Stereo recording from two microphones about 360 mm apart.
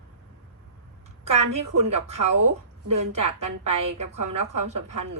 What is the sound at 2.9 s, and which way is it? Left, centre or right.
A woman's voice, right.